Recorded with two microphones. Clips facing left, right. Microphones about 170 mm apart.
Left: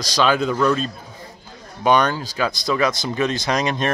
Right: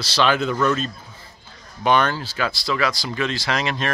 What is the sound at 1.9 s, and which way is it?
Speech, 15° left (ahead or behind).